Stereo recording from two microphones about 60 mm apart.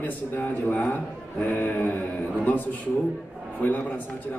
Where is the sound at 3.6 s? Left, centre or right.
Left.